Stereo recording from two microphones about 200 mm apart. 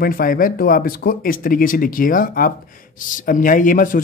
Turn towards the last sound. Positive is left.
turn(degrees=45)  # may be behind; listen again after turning